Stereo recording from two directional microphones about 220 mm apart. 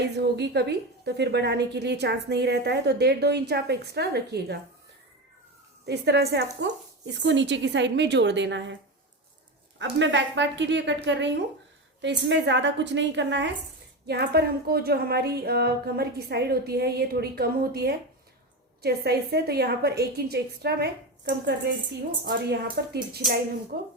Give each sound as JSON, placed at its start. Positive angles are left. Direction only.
{"t": 0.0, "sound": "a woman's voice", "side_deg": -50}
{"t": 5.8, "sound": "a woman's voice", "side_deg": -50}
{"t": 9.7, "sound": "a woman's voice", "side_deg": -55}